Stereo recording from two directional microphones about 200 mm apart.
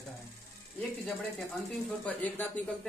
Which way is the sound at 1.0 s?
5° left (ahead or behind).